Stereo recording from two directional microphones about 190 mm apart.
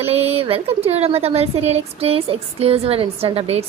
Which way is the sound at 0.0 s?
30° right (ahead or behind).